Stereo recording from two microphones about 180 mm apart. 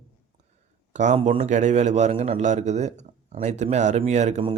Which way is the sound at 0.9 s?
40° right (ahead or behind).